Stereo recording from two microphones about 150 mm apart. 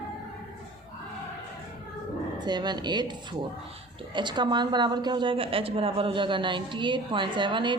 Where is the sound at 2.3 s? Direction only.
30° right (ahead or behind).